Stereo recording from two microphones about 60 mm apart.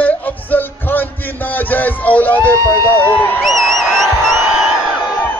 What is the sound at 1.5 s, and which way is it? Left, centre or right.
Speech, left.